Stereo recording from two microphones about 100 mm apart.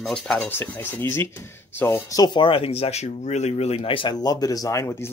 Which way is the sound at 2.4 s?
70° left (ahead or behind).